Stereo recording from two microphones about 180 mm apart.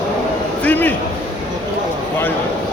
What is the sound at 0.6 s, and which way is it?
Speech, 10° left (ahead or behind).